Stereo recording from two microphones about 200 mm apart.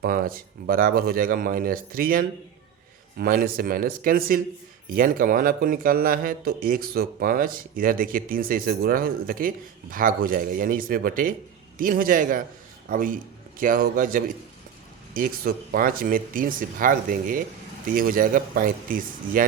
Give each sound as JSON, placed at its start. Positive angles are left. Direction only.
{"t": 0.0, "sound": "a man's voice", "side_deg": -45}